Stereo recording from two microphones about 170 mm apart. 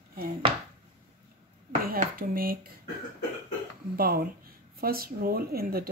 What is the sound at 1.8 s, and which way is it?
Speech, 60° right (ahead or behind).